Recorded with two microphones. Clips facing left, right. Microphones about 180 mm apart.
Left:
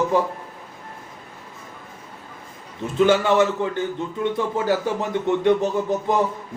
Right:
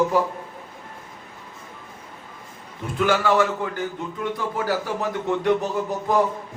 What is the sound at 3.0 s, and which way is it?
Speech, 25° left (ahead or behind).